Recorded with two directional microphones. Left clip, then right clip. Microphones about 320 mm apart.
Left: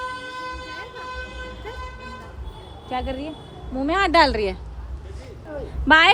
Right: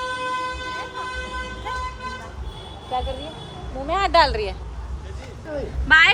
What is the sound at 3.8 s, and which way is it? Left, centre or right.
Speech, left.